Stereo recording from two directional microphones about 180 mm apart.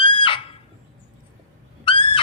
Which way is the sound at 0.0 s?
30° left (ahead or behind).